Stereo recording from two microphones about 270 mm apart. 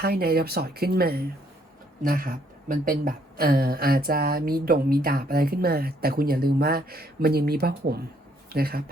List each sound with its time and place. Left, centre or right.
0.0 s a woman's voice: right